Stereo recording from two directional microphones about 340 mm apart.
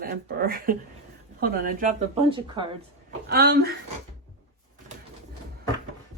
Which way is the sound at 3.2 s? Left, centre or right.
Right.